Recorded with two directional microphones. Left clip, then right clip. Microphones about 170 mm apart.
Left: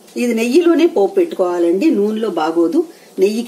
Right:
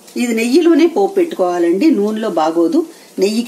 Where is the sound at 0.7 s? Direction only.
20° right (ahead or behind).